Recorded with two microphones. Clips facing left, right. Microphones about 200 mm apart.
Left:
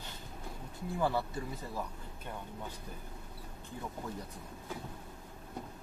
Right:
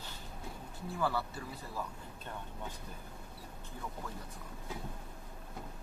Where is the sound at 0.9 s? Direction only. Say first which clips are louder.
Left 3 dB; 20° left (ahead or behind).